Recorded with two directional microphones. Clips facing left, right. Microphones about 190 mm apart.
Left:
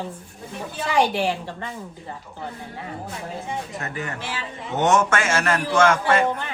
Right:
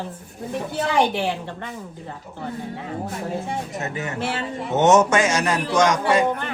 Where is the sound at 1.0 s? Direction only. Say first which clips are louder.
Left 1 dB; 20° right (ahead or behind).